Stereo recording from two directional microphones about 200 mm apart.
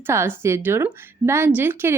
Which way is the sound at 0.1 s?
15° right (ahead or behind).